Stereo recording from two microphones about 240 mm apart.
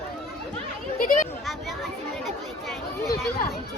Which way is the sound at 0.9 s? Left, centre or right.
Left.